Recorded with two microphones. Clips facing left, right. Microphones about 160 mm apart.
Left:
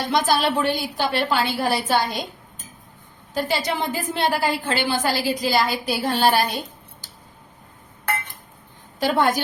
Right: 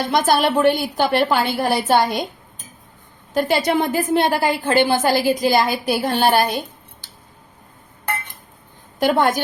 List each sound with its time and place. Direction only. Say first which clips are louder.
0.1 s a woman's voice: right 3 dB; 50° right (ahead or behind)
3.3 s a woman's voice: right 6 dB; 55° right (ahead or behind)
9.0 s a woman's voice: right 3 dB; 55° right (ahead or behind)